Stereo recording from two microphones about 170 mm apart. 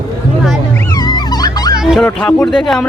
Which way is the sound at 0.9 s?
25° left (ahead or behind).